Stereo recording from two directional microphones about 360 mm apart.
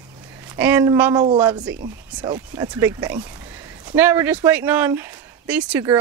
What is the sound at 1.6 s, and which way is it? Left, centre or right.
Speech, right.